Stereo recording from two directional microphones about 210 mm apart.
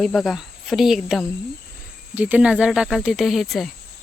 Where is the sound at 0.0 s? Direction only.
Centre (ahead or behind).